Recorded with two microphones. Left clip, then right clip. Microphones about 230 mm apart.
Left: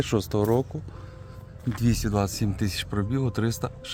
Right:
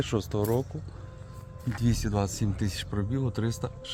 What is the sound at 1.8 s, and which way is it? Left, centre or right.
Speech, left.